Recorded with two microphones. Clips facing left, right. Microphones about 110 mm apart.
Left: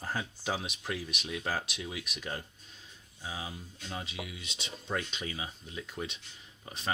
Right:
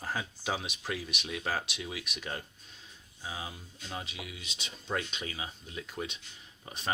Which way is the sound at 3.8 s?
15° right (ahead or behind).